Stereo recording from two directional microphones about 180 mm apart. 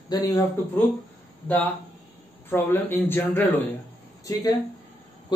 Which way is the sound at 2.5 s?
10° left (ahead or behind).